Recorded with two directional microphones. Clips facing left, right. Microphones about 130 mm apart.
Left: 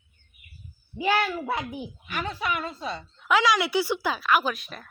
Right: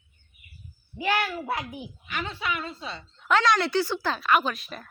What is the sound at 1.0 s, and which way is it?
Speech, 20° left (ahead or behind).